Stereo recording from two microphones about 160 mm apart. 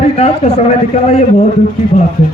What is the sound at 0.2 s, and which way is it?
Speech, 40° left (ahead or behind).